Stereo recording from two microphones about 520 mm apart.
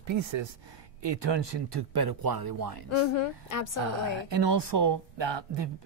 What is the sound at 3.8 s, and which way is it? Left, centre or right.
A woman's voice, right.